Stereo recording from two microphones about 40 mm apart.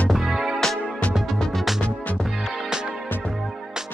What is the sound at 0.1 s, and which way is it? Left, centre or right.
Music, centre.